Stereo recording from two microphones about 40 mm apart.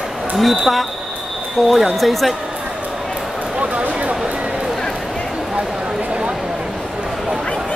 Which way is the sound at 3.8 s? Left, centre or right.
Right.